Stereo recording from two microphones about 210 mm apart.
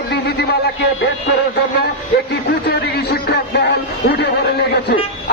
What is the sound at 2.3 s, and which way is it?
Speech, 50° left (ahead or behind).